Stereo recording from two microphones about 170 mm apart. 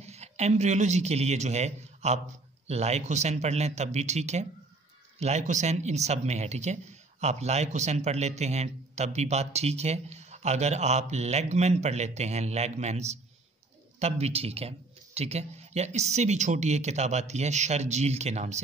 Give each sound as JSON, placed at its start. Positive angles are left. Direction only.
{"t": 0.0, "sound": "a man's voice", "side_deg": -40}